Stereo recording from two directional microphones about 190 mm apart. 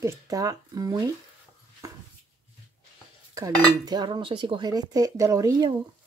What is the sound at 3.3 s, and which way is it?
Cutlery, 20° right (ahead or behind).